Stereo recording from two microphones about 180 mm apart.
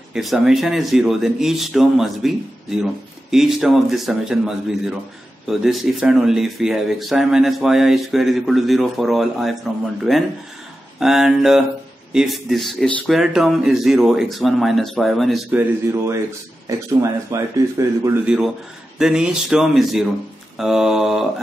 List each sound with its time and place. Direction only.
0.1 s speech: centre (ahead or behind)
15.5 s speech: 15° right (ahead or behind)
18.2 s speech: 5° right (ahead or behind)